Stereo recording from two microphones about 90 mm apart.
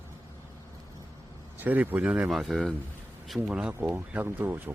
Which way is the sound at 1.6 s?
20° right (ahead or behind).